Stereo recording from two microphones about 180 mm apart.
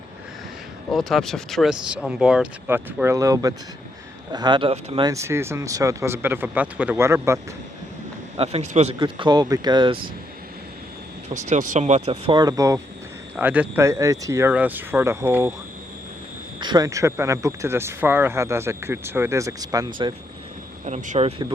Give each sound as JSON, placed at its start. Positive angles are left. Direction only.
{"t": 0.9, "sound": "speech", "side_deg": 0}
{"t": 5.0, "sound": "speech", "side_deg": -15}
{"t": 8.4, "sound": "speech", "side_deg": -35}
{"t": 9.0, "sound": "speech", "side_deg": -25}
{"t": 11.3, "sound": "speech", "side_deg": -40}
{"t": 12.4, "sound": "speech", "side_deg": -20}
{"t": 13.3, "sound": "speech", "side_deg": -10}
{"t": 16.6, "sound": "speech", "side_deg": -25}
{"t": 20.8, "sound": "speech", "side_deg": -45}